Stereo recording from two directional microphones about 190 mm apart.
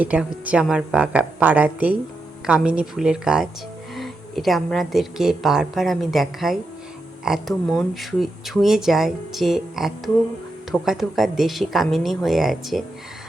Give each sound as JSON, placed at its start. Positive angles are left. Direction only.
{"t": 0.0, "sound": "a woman's voice", "side_deg": -5}